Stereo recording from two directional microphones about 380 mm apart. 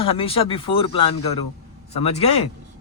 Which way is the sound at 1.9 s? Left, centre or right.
Centre.